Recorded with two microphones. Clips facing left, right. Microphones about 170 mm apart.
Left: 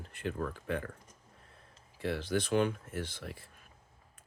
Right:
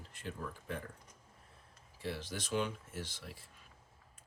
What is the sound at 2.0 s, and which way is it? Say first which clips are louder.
Speech: left 9 dB; 60° left (ahead or behind).